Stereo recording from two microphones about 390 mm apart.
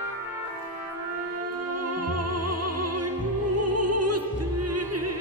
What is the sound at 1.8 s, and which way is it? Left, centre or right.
Music, right.